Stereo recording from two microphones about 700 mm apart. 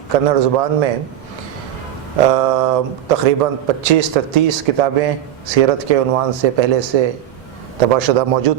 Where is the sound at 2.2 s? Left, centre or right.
Right.